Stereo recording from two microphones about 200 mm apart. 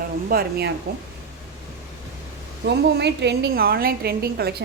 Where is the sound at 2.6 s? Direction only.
55° right (ahead or behind).